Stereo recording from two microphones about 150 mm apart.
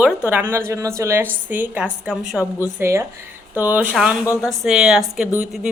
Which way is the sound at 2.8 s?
20° right (ahead or behind).